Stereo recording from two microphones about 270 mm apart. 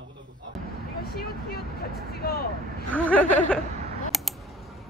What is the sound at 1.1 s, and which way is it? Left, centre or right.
Speech, left.